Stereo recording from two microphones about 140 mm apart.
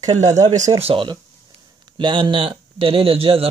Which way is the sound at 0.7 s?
40° right (ahead or behind).